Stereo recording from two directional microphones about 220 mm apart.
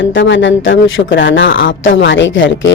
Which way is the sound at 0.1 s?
55° left (ahead or behind).